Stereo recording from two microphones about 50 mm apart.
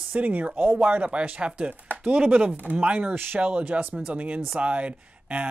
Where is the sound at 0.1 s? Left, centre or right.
Right.